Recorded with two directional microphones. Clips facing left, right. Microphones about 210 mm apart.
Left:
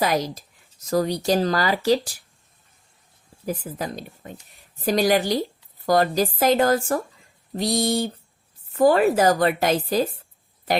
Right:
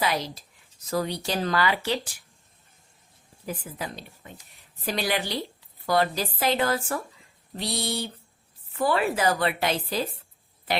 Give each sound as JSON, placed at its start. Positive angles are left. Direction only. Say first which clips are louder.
{"t": 0.0, "sound": "a woman's voice", "louder": "left 5 dB", "side_deg": 45}
{"t": 3.4, "sound": "a woman's voice", "louder": "left 6 dB", "side_deg": 40}